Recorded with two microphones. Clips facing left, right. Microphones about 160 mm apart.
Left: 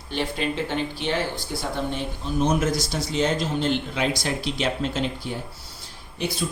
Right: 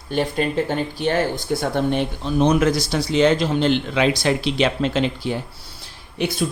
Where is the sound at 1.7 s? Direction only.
70° right (ahead or behind).